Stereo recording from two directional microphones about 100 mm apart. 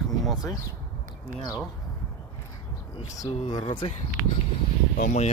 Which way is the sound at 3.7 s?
50° left (ahead or behind).